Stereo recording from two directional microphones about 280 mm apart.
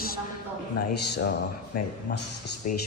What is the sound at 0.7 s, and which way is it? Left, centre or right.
Speech, left.